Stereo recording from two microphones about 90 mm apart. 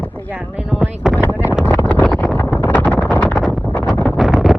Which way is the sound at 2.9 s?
20° left (ahead or behind).